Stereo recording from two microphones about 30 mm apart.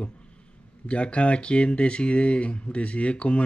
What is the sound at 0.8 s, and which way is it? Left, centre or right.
Speech, left.